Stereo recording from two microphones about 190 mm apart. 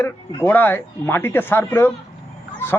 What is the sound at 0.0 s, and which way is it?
Speech, 10° left (ahead or behind).